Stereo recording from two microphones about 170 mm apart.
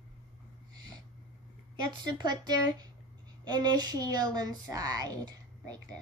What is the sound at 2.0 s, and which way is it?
Speech, 25° right (ahead or behind).